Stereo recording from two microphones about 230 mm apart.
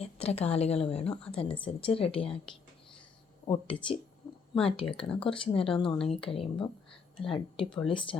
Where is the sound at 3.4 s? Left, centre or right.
Centre.